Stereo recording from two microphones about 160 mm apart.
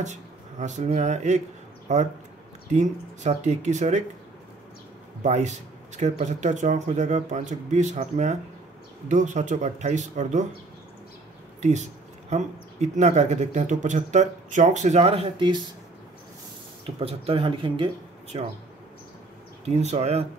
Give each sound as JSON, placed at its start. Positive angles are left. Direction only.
{"t": 0.0, "sound": "speech", "side_deg": -50}
{"t": 5.2, "sound": "speech", "side_deg": -45}
{"t": 12.3, "sound": "speech", "side_deg": -50}
{"t": 16.8, "sound": "speech", "side_deg": -35}
{"t": 19.6, "sound": "speech", "side_deg": -45}